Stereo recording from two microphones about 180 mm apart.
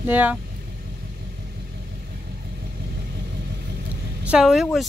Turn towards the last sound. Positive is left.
turn(degrees=0)  # may be behind; listen again after turning